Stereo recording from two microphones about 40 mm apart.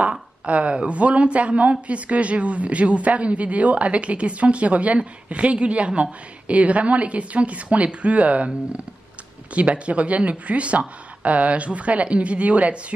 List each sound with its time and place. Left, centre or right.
0.5 s a woman's voice: right
9.5 s a woman's voice: right